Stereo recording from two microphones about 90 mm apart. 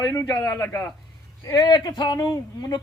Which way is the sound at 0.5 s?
35° left (ahead or behind).